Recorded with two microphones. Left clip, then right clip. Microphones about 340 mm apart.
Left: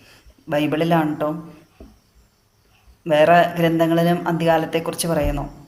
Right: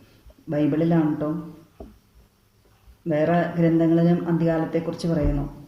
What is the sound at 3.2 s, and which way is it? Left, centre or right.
A man's voice, left.